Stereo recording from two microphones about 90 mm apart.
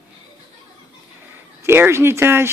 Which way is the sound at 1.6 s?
25° right (ahead or behind).